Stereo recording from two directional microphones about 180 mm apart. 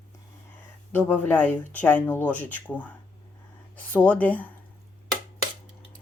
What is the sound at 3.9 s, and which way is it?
Speech, 10° left (ahead or behind).